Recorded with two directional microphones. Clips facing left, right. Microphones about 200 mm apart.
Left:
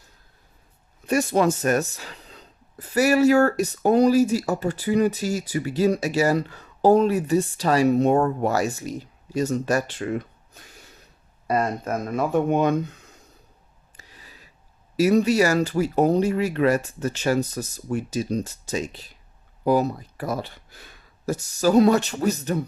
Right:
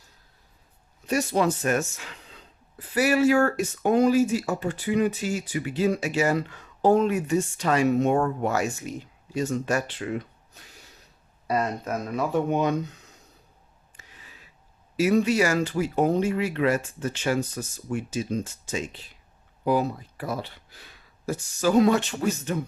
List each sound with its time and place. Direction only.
1.0 s speech: 50° left (ahead or behind)
13.9 s a sound: 35° left (ahead or behind)
15.0 s speech: 40° left (ahead or behind)